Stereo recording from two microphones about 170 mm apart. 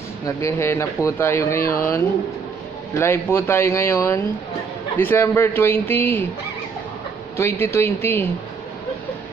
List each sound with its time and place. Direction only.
0.4 s speech: 15° left (ahead or behind)
3.0 s speech: 15° left (ahead or behind)
7.3 s speech: 15° left (ahead or behind)